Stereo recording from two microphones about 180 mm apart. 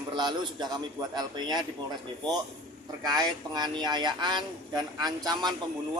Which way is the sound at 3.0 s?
20° right (ahead or behind).